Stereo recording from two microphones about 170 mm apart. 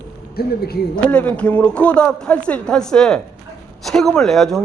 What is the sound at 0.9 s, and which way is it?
Speech, 10° left (ahead or behind).